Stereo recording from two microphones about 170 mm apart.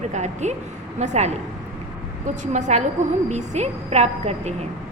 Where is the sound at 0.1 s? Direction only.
45° right (ahead or behind).